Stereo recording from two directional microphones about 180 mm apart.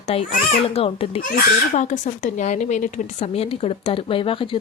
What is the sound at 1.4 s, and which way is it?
A woman's voice, 45° left (ahead or behind).